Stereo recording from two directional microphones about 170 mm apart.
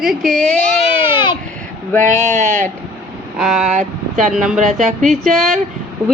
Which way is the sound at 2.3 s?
45° right (ahead or behind).